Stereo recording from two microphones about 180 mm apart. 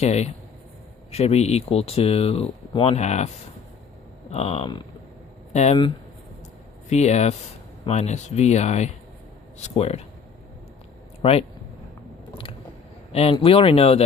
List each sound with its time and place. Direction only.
0.0 s speech: 35° left (ahead or behind)
6.9 s speech: 40° left (ahead or behind)
11.2 s speech: 35° left (ahead or behind)
13.1 s speech: 30° left (ahead or behind)